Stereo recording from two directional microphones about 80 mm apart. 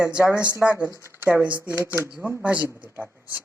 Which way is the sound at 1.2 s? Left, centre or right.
Centre.